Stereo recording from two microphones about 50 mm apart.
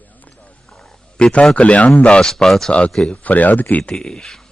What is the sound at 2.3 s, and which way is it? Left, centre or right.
Speech, centre.